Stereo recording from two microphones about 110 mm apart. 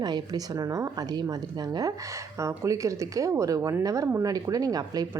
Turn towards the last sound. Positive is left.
turn(degrees=-35)  # may be behind; listen again after turning